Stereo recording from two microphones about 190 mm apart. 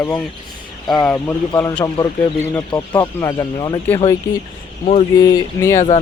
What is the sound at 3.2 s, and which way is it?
Speech, 20° left (ahead or behind).